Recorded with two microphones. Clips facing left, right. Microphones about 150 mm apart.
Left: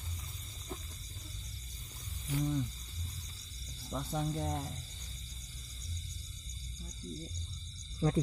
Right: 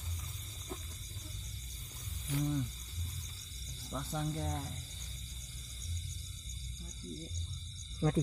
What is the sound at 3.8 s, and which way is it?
Speech, 15° left (ahead or behind).